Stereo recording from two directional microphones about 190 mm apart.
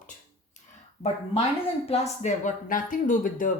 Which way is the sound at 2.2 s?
40° left (ahead or behind).